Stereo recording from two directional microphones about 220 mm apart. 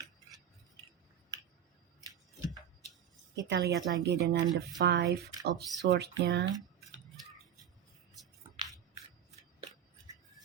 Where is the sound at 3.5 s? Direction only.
50° right (ahead or behind).